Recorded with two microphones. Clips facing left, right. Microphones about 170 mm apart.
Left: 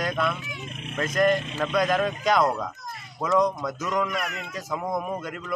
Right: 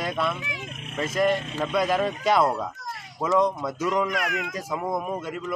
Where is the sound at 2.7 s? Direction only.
90° right.